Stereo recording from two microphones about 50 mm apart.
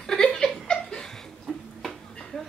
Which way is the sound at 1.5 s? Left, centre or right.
Centre.